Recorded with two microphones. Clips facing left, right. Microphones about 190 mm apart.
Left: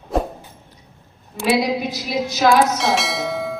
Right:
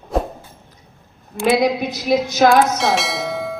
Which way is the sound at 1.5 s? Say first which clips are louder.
Right 2 dB; 50° right (ahead or behind).